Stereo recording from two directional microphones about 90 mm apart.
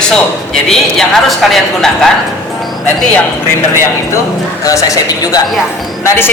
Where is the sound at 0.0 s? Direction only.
5° left (ahead or behind).